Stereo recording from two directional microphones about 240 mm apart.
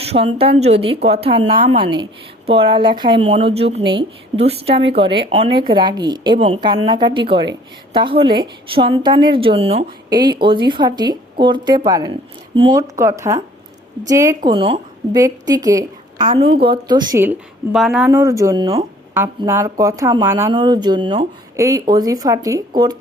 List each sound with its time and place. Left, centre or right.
0.0 s a woman's voice: right; by 18.1 s centre
18.1 s speech: centre